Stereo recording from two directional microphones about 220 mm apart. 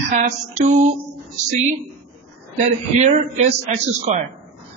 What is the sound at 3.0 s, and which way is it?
Speech, 30° right (ahead or behind).